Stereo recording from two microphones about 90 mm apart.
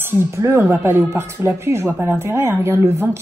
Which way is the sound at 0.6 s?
25° right (ahead or behind).